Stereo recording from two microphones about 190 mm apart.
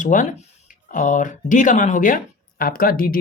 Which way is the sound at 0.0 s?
40° left (ahead or behind).